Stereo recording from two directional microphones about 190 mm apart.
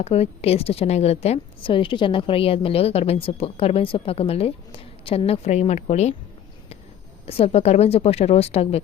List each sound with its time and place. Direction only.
0.0 s a woman's voice: 30° left (ahead or behind)
7.3 s a woman's voice: 30° left (ahead or behind)